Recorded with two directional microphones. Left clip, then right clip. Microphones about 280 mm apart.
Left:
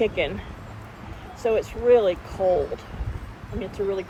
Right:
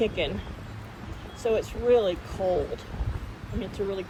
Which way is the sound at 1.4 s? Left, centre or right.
Left.